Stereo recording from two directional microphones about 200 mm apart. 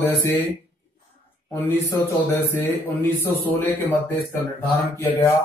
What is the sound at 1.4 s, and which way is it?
A man's voice, 10° left (ahead or behind).